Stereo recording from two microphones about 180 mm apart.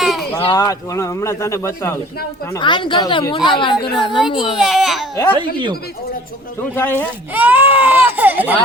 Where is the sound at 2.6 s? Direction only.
25° left (ahead or behind).